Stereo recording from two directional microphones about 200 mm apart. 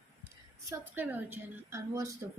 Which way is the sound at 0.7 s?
10° right (ahead or behind).